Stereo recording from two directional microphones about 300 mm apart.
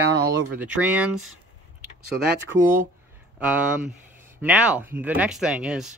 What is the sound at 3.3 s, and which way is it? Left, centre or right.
Speech, centre.